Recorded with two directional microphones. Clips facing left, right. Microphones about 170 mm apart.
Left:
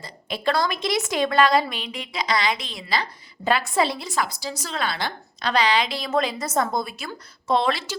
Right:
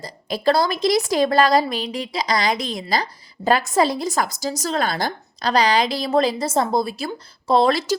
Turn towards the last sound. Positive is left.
turn(degrees=-40)  # may be behind; listen again after turning